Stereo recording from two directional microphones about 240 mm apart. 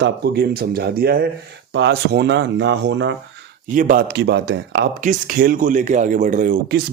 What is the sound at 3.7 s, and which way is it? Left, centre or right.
Speech, right.